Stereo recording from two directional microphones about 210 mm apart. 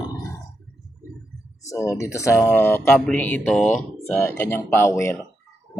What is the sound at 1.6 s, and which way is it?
Speech, 15° left (ahead or behind).